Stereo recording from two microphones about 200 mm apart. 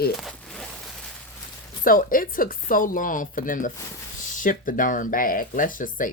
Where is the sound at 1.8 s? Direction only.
45° left (ahead or behind).